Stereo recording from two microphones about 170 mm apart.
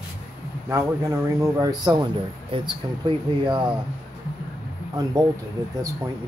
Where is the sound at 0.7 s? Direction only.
20° right (ahead or behind).